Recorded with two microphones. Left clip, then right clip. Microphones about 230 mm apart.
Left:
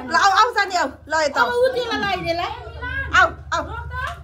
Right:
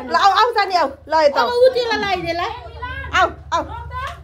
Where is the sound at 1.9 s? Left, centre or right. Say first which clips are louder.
Right 2 dB; right.